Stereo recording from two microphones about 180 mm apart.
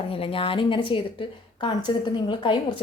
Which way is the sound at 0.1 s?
30° left (ahead or behind).